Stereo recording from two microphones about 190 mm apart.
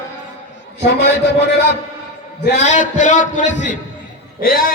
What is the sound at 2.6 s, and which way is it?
A man's voice, 40° left (ahead or behind).